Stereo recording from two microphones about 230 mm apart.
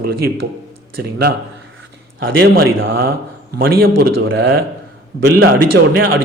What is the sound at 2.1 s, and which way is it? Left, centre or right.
Speech, right.